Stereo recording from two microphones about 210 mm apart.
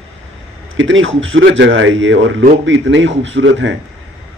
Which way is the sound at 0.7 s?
65° right (ahead or behind).